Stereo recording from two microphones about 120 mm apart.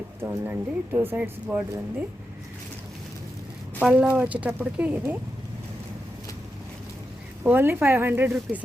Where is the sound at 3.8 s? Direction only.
10° right (ahead or behind).